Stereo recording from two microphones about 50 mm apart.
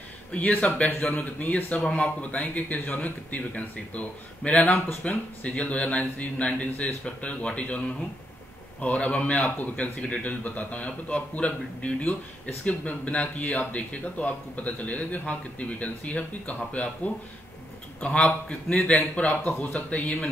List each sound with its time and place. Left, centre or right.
0.3 s speech: left
1.8 s speech: left
8.8 s speech: left